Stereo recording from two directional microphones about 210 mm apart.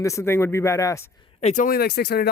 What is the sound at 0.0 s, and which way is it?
Speech, 15° left (ahead or behind).